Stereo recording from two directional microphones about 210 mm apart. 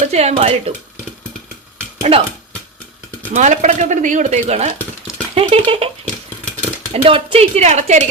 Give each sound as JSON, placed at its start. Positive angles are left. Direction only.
{"t": 0.1, "sound": "speech", "side_deg": -30}
{"t": 2.0, "sound": "speech", "side_deg": -30}
{"t": 3.3, "sound": "speech", "side_deg": -35}
{"t": 6.4, "sound": "a sound", "side_deg": 5}
{"t": 6.9, "sound": "speech", "side_deg": -25}